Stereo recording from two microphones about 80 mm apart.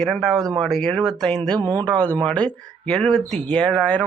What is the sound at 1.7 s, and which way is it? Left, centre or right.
Speech, left.